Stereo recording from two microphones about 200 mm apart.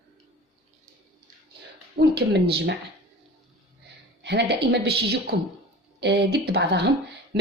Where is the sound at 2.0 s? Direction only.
55° right (ahead or behind).